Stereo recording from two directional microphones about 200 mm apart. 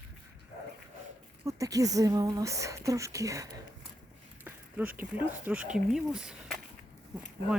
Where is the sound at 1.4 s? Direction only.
15° right (ahead or behind).